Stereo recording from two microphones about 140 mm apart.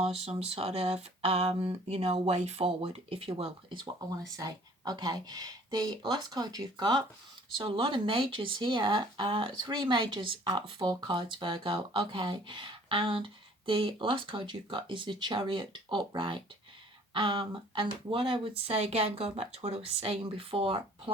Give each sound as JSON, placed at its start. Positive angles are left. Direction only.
{"t": 0.0, "sound": "speech", "side_deg": -45}